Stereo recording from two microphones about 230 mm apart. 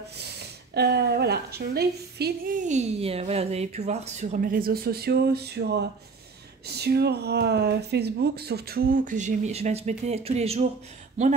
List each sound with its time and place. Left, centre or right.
0.7 s a woman's voice: right